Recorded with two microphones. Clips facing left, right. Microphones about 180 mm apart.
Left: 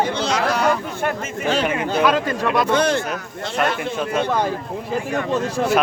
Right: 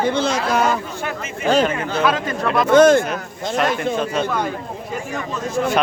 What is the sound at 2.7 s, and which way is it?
Speech, 50° right (ahead or behind).